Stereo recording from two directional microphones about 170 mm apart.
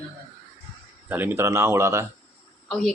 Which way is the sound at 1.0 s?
10° right (ahead or behind).